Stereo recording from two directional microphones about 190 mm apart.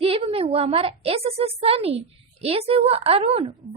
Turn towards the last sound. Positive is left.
turn(degrees=-30)  # may be behind; listen again after turning